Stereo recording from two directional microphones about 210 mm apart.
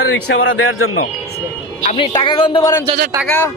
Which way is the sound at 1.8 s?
30° left (ahead or behind).